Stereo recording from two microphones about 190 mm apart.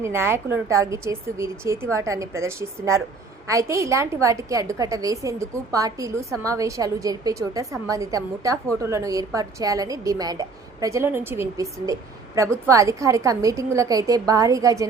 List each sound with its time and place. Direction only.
0.0 s a woman's voice: 10° right (ahead or behind)